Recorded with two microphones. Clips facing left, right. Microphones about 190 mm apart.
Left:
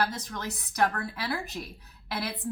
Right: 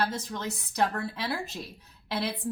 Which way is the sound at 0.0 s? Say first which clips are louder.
Right 1 dB; 25° right (ahead or behind).